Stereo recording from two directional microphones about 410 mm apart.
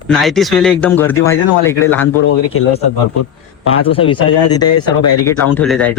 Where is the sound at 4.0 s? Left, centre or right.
Centre.